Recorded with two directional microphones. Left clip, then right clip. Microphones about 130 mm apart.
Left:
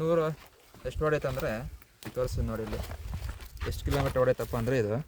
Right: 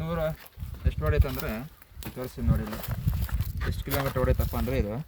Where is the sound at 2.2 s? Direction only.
40° left (ahead or behind).